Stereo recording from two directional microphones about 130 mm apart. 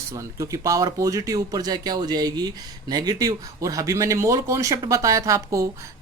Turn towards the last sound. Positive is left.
turn(degrees=-25)  # may be behind; listen again after turning